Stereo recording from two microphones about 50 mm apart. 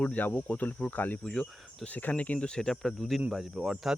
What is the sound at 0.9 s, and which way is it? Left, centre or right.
Speech, left.